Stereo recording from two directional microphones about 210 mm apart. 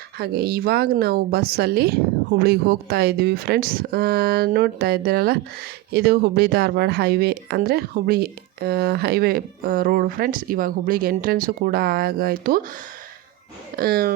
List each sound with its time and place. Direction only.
0.2 s speech: 50° right (ahead or behind)
13.7 s speech: 45° right (ahead or behind)